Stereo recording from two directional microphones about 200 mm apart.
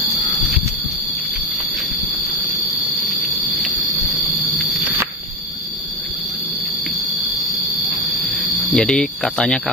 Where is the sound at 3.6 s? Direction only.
Centre (ahead or behind).